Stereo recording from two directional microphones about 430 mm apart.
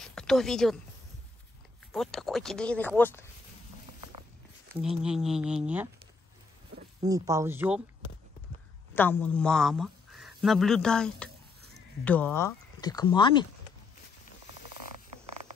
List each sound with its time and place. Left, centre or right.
0.0 s speech: centre
1.9 s speech: centre
4.7 s speech: centre
7.0 s speech: centre
8.9 s speech: centre